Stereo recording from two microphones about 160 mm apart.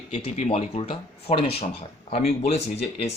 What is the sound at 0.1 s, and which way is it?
Speech, 35° left (ahead or behind).